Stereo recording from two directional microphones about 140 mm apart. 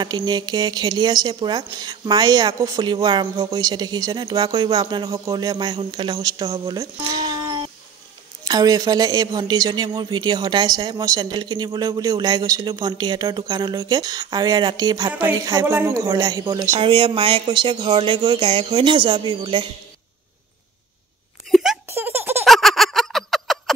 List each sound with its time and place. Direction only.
0.0 s speech: 30° right (ahead or behind)
7.0 s a sound: 25° right (ahead or behind)
8.5 s speech: 25° right (ahead or behind)
21.5 s a sound: centre (ahead or behind)
21.8 s baby laughter: 15° right (ahead or behind)
22.4 s fowl: centre (ahead or behind)